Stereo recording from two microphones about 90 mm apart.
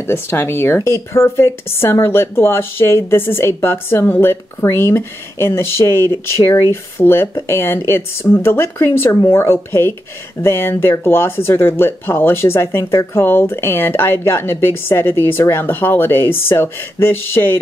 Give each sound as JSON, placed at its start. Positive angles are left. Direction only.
{"t": 0.0, "sound": "speech", "side_deg": 30}